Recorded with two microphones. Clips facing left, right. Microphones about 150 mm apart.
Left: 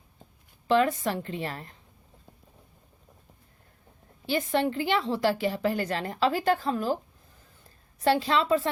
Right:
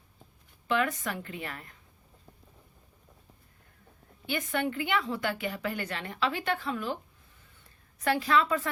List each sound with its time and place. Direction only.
0.7 s a woman's voice: 30° left (ahead or behind)
4.3 s a woman's voice: 30° left (ahead or behind)